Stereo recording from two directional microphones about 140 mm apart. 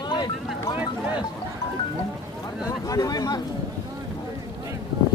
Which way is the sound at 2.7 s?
25° left (ahead or behind).